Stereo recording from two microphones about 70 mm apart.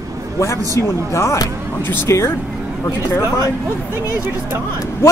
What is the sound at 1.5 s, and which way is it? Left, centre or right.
Speech, right.